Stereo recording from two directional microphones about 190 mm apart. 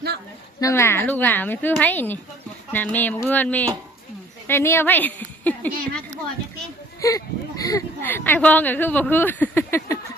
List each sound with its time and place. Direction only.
0.6 s speech: 15° left (ahead or behind)
7.0 s speech: 15° left (ahead or behind)